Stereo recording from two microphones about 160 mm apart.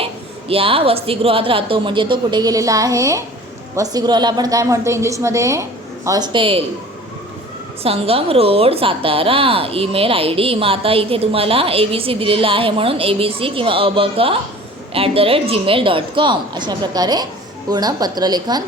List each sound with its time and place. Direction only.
0.0 s a woman's voice: 35° right (ahead or behind)
7.8 s a woman's voice: 35° right (ahead or behind)